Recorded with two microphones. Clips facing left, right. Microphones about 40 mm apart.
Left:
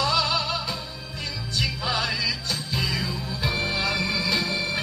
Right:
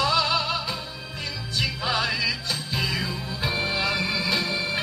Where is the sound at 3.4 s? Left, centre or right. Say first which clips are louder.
Even; centre.